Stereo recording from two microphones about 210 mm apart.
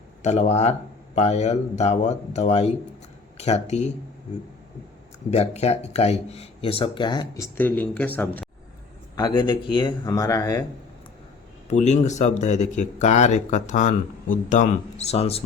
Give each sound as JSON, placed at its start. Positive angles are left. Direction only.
{"t": 0.2, "sound": "speech", "side_deg": 35}
{"t": 5.3, "sound": "speech", "side_deg": 30}
{"t": 9.1, "sound": "speech", "side_deg": 20}
{"t": 11.7, "sound": "speech", "side_deg": 35}